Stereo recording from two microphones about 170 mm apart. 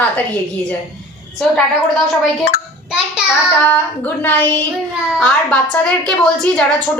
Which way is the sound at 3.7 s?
10° left (ahead or behind).